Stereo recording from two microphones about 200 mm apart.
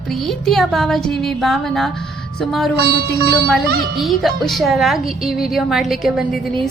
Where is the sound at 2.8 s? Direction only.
50° right (ahead or behind).